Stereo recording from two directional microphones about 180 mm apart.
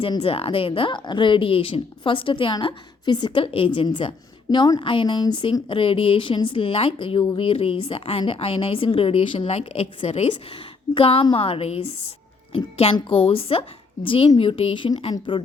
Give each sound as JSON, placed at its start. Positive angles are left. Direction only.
{"t": 0.0, "sound": "a woman's voice", "side_deg": 30}